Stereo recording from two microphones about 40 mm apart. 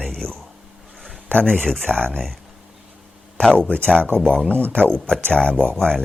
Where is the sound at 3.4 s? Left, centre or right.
Left.